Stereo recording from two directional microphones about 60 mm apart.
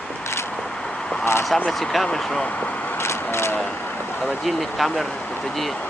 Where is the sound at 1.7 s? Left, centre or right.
Centre.